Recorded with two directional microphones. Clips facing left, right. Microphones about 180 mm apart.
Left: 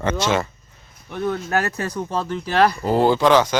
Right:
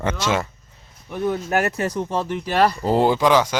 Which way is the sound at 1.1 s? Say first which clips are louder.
Right 1 dB; 10° right (ahead or behind).